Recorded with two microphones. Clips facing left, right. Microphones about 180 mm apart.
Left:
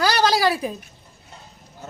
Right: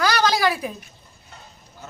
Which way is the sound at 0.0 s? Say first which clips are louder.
Left 1 dB; 35° left (ahead or behind).